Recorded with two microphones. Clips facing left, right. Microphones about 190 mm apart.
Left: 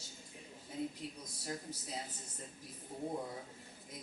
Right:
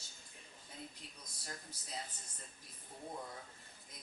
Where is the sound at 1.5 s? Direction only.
5° left (ahead or behind).